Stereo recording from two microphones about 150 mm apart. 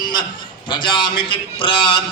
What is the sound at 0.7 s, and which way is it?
A man's voice, 30° left (ahead or behind).